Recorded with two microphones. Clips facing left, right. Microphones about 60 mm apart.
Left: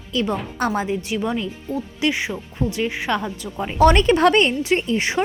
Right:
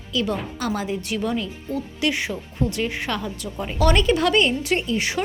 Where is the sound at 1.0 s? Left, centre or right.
Centre.